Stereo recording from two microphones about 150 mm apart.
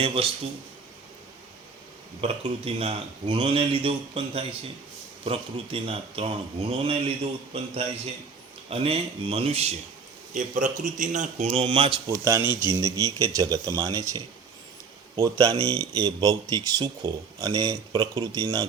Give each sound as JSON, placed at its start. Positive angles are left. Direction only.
{"t": 0.0, "sound": "speech", "side_deg": -40}
{"t": 2.2, "sound": "speech", "side_deg": -40}
{"t": 10.3, "sound": "a man's voice", "side_deg": -60}
{"t": 12.2, "sound": "speech", "side_deg": -15}